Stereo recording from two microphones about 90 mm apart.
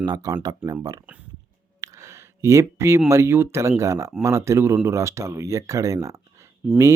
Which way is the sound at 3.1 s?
30° right (ahead or behind).